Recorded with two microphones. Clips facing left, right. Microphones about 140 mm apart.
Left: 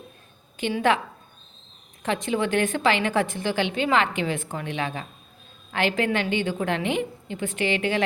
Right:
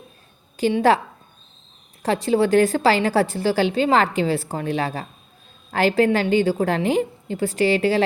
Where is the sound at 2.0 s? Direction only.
35° right (ahead or behind).